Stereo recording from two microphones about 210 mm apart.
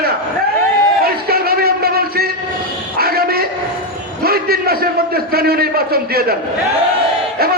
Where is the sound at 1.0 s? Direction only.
45° right (ahead or behind).